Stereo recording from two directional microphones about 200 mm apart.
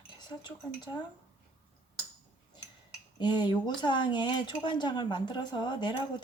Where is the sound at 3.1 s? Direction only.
20° left (ahead or behind).